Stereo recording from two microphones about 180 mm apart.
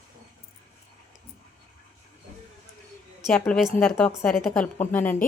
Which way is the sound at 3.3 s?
5° left (ahead or behind).